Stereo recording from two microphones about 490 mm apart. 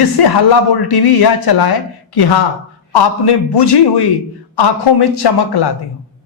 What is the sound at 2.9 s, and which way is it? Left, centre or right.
Speech, left.